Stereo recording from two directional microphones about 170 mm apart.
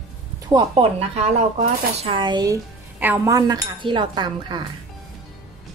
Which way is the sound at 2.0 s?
30° right (ahead or behind).